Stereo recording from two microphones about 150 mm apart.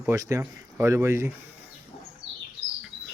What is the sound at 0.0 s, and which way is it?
Speech, 20° right (ahead or behind).